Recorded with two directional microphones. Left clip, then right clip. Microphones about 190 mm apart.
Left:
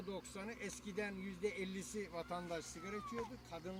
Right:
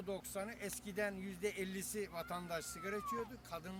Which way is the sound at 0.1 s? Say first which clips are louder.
Right 5 dB; 15° right (ahead or behind).